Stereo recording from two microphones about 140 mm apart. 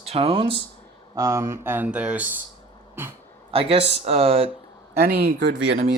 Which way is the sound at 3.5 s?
40° right (ahead or behind).